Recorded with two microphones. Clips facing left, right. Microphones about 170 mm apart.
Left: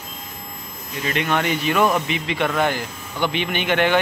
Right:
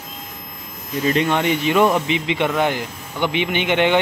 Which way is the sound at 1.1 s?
35° right (ahead or behind).